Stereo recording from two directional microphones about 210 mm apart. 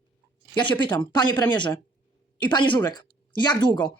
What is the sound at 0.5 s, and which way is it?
A woman's voice, 20° left (ahead or behind).